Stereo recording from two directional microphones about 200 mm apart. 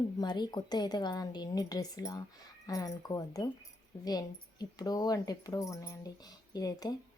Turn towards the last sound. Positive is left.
turn(degrees=20)  # may be behind; listen again after turning